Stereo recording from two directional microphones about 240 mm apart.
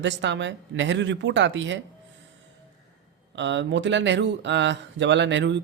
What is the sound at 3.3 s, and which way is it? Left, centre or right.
Speech, right.